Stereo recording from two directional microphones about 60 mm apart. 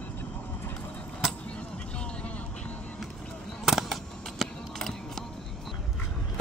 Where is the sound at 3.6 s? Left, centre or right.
Centre.